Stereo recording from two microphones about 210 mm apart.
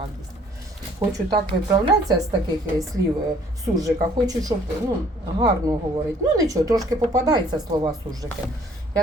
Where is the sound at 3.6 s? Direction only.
15° right (ahead or behind).